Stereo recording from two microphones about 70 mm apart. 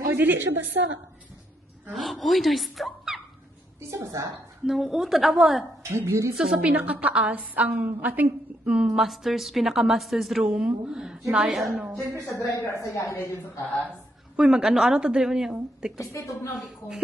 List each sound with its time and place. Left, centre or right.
0.1 s a sound: right
1.9 s a woman's voice: centre
3.9 s a woman's voice: right
4.6 s a woman's voice: centre
5.8 s a woman's voice: right
6.3 s a woman's voice: centre
8.6 s a woman's voice: centre
10.4 s a woman's voice: centre
12.3 s a woman's voice: left
13.8 s a woman's voice: centre
16.1 s a woman's voice: left
16.5 s a woman's voice: centre